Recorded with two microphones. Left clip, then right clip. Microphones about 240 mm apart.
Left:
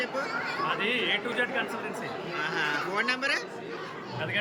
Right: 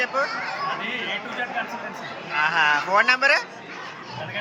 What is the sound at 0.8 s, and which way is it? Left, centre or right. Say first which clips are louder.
Speech: even; centre.